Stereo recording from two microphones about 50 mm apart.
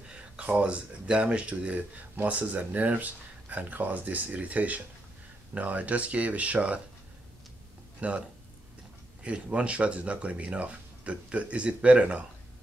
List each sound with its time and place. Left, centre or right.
0.1 s speech: right
8.0 s speech: right
9.2 s speech: right